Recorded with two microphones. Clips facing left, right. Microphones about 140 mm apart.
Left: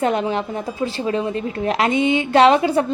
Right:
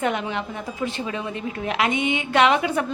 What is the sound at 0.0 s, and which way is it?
A woman's voice, 35° left (ahead or behind).